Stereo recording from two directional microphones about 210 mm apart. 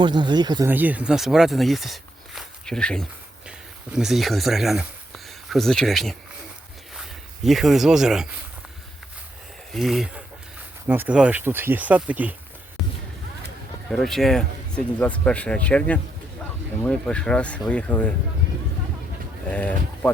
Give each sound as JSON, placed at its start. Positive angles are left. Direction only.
{"t": 0.0, "sound": "speech", "side_deg": -20}
{"t": 0.7, "sound": "speech", "side_deg": -10}
{"t": 9.7, "sound": "speech", "side_deg": 0}
{"t": 13.9, "sound": "speech", "side_deg": 0}
{"t": 19.5, "sound": "speech", "side_deg": 5}